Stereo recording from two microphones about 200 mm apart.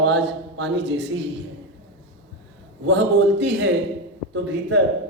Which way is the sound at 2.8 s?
65° right (ahead or behind).